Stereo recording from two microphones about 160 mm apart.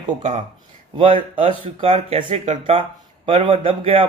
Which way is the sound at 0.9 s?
35° right (ahead or behind).